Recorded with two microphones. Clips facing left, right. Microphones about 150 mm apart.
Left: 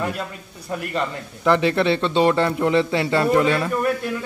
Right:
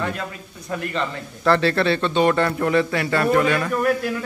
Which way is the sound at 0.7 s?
10° left (ahead or behind).